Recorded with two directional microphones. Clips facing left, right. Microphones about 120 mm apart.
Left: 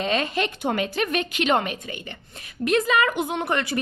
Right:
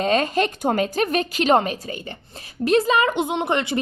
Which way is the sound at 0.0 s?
40° right (ahead or behind).